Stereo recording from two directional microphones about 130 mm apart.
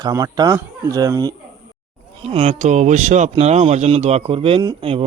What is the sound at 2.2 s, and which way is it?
Speech, 50° right (ahead or behind).